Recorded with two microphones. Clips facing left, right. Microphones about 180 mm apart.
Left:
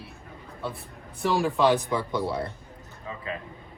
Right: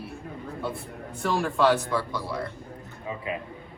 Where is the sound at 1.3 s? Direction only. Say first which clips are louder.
Left 2 dB; centre (ahead or behind).